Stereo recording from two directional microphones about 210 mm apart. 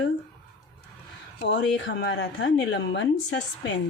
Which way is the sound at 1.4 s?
55° left (ahead or behind).